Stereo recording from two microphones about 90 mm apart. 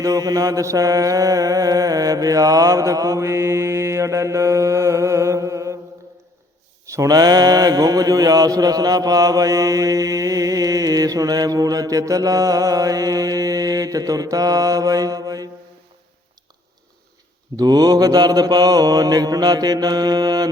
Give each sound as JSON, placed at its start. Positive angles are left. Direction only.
{"t": 0.0, "sound": "mantra", "side_deg": -40}
{"t": 6.8, "sound": "mantra", "side_deg": -35}
{"t": 17.6, "sound": "mantra", "side_deg": -45}